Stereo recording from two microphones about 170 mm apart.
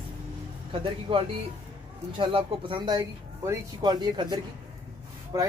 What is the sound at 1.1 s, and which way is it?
Speech, 30° right (ahead or behind).